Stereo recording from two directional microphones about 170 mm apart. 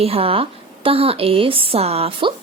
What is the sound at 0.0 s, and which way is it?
A woman's voice, 35° right (ahead or behind).